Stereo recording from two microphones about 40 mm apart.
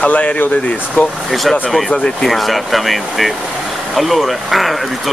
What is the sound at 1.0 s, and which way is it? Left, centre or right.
Speech, left.